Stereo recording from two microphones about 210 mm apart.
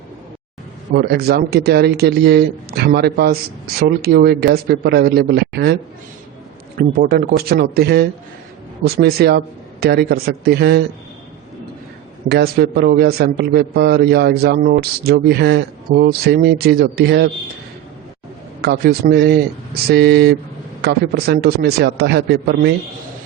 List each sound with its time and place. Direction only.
0.9 s a man's voice: 50° right (ahead or behind)
6.7 s a man's voice: 45° right (ahead or behind)
12.3 s a man's voice: 45° right (ahead or behind)
18.6 s a man's voice: 50° right (ahead or behind)